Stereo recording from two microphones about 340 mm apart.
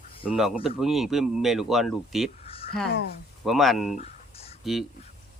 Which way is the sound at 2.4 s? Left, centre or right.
Centre.